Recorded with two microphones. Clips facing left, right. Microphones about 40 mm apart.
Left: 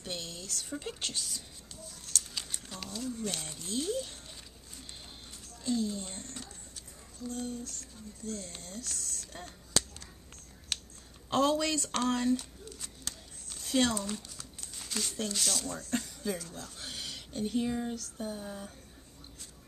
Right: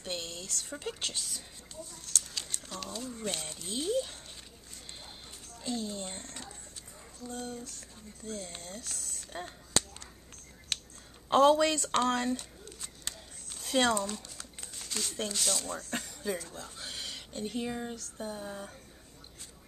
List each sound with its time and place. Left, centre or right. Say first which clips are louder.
0.0 s speech: right 2 dB; centre
2.0 s a sound: even; centre
3.1 s speech: left 2 dB; centre
5.6 s speech: left 3 dB; centre
6.3 s a sound: right 1 dB; centre
7.2 s speech: left 2 dB; centre
11.3 s speech: right 5 dB; right
13.0 s a sound: right 4 dB; centre
14.8 s crumpling: left 1 dB; centre
15.3 s speech: right 1 dB; centre
15.6 s speech: left 2 dB; centre